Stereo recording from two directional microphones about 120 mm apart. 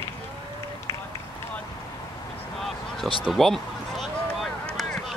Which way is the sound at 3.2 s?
Centre (ahead or behind).